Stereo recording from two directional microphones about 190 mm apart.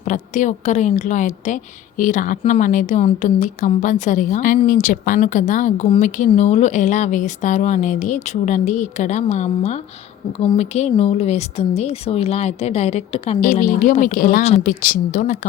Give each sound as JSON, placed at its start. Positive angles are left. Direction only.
{"t": 0.0, "sound": "a woman's voice", "side_deg": 40}
{"t": 13.4, "sound": "speech", "side_deg": 45}